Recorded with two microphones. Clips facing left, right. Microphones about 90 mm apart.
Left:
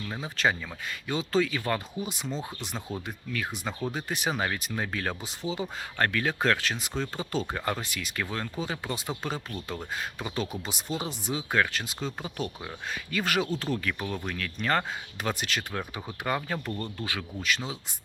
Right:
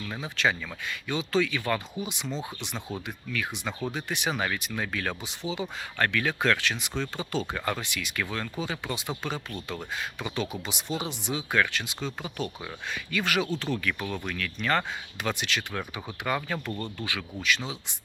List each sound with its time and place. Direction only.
0.3 s speech: 40° left (ahead or behind)
15.7 s speech: 25° left (ahead or behind); by 17.7 s 40° left (ahead or behind)